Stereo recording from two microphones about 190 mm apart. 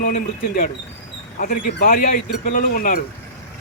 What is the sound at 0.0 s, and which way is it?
Speech, 50° left (ahead or behind).